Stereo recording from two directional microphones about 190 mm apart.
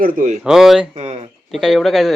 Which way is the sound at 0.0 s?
45° right (ahead or behind).